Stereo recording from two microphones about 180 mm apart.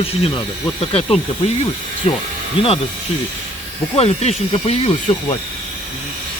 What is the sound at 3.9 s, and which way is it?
Speech, 35° left (ahead or behind).